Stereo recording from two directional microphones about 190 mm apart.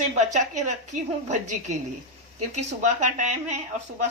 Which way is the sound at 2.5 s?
40° right (ahead or behind).